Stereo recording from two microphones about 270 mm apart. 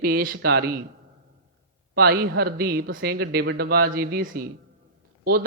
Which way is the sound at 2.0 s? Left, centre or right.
Right.